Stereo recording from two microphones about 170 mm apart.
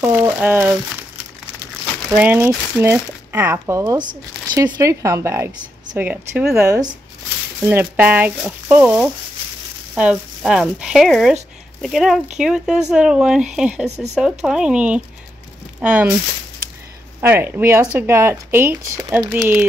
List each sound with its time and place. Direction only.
0.0 s a sound: 10° right (ahead or behind)
2.0 s speech: 10° right (ahead or behind)
17.2 s speech: 10° right (ahead or behind)